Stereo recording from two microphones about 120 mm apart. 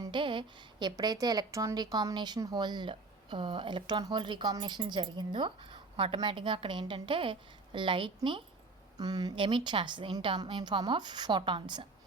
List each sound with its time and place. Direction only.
0.0 s a woman's voice: 40° right (ahead or behind)
9.0 s a woman's voice: 35° right (ahead or behind)